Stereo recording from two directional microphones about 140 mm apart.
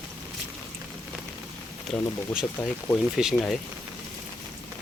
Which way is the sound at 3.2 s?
5° right (ahead or behind).